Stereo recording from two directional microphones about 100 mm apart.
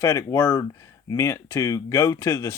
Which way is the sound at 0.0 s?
30° left (ahead or behind).